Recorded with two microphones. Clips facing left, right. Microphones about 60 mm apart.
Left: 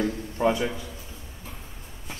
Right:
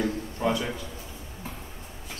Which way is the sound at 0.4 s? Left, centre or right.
Left.